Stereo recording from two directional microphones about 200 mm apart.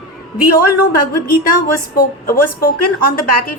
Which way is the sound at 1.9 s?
45° left (ahead or behind).